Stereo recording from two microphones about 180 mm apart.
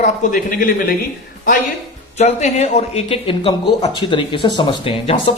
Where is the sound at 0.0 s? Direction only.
50° left (ahead or behind).